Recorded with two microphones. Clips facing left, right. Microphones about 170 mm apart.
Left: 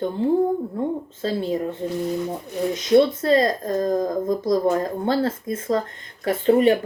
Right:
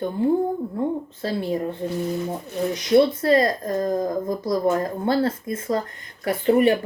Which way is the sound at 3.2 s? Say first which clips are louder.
Even; 20° left (ahead or behind).